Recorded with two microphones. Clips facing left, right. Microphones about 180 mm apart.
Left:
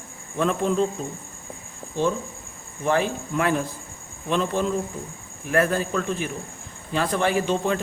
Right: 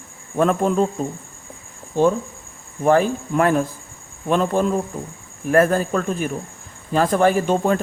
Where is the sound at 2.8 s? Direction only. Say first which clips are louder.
Right 6 dB; 45° right (ahead or behind).